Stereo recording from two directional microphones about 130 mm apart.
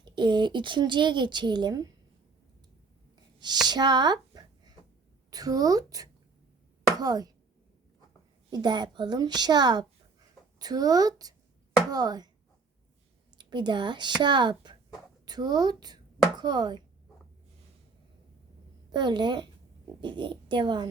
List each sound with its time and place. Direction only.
0.0 s speech: 35° right (ahead or behind)
3.7 s a sound: 35° right (ahead or behind)
5.3 s speech: 30° right (ahead or behind)
8.4 s speech: 35° right (ahead or behind)
13.4 s speech: 35° right (ahead or behind)
18.9 s speech: 35° right (ahead or behind)